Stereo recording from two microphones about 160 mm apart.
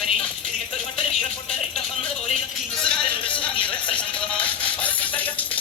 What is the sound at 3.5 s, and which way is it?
Music, 30° left (ahead or behind).